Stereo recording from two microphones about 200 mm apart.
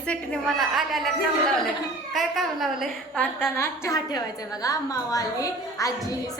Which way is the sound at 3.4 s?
10° left (ahead or behind).